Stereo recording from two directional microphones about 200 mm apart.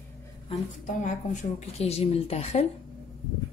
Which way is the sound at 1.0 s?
35° left (ahead or behind).